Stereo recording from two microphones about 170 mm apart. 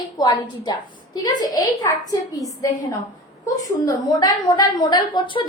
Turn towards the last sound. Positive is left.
turn(degrees=25)  # may be behind; listen again after turning